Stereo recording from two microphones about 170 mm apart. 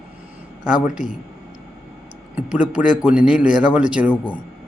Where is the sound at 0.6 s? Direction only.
5° right (ahead or behind).